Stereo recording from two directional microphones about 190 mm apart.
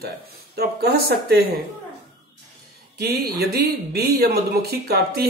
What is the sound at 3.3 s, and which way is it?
Speech, 55° right (ahead or behind).